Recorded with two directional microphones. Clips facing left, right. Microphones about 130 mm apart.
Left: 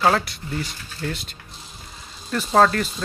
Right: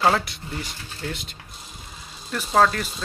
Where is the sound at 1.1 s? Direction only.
20° right (ahead or behind).